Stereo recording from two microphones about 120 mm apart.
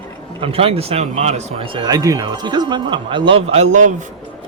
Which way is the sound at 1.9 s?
30° right (ahead or behind).